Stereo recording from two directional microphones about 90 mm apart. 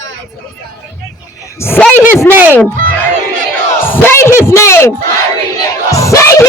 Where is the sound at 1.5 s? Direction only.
25° left (ahead or behind).